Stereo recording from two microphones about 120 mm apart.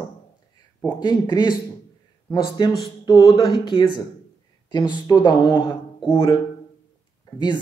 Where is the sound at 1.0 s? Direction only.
35° left (ahead or behind).